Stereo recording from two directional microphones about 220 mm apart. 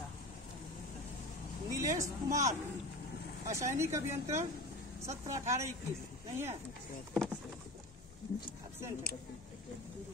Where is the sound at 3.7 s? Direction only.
10° right (ahead or behind).